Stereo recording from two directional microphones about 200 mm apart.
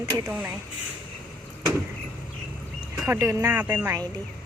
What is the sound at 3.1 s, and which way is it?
Speech, 15° right (ahead or behind).